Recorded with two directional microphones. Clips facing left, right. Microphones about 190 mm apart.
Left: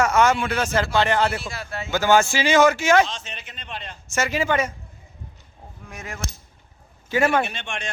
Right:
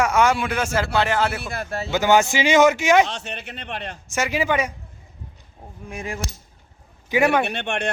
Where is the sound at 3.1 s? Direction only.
65° right (ahead or behind).